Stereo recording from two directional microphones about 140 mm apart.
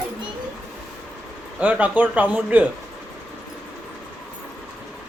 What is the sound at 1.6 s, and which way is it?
Speech, 10° right (ahead or behind).